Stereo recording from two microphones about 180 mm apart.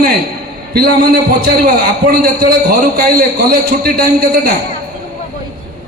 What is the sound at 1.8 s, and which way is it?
A man's voice, 55° right (ahead or behind).